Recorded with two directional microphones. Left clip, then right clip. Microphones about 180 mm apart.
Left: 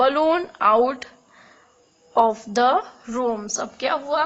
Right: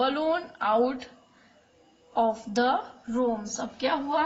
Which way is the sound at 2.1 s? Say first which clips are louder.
Left 7 dB; 45° left (ahead or behind).